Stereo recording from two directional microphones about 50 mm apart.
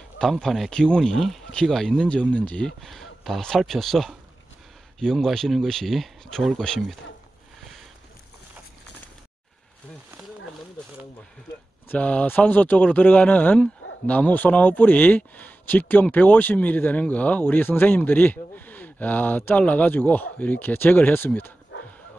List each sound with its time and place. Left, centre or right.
0.2 s speech: centre
0.7 s speech: centre
2.0 s speech: left
2.6 s speech: centre
11.9 s speech: left
17.4 s speech: left